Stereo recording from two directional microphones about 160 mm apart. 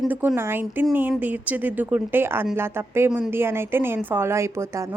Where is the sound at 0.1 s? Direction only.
10° right (ahead or behind).